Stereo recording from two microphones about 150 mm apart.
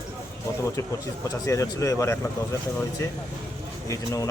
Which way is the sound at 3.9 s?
20° left (ahead or behind).